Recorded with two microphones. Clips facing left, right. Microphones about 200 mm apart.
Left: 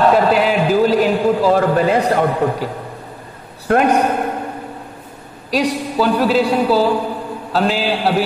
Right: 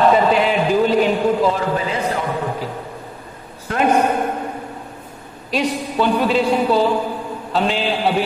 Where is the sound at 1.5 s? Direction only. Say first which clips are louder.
Left 7 dB; 60° left (ahead or behind).